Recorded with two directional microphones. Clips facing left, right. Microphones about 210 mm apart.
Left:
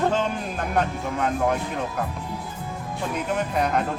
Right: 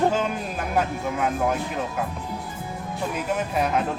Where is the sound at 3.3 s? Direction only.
5° right (ahead or behind).